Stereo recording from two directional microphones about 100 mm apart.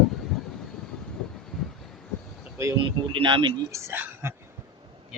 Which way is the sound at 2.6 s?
25° right (ahead or behind).